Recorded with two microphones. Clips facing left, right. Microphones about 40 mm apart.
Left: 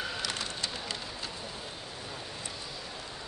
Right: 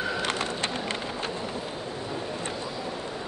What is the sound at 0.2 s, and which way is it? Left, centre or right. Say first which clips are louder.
Bird: right 7 dB; right.